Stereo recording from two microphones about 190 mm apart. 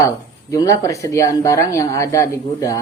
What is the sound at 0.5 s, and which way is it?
Speech, 15° left (ahead or behind).